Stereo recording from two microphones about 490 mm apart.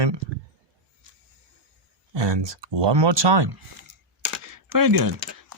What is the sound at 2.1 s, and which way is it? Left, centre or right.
Speech, right.